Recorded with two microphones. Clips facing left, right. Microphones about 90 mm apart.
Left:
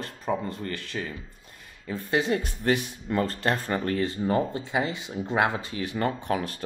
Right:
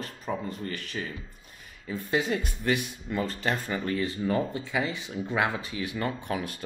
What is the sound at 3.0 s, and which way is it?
Speech, 50° left (ahead or behind).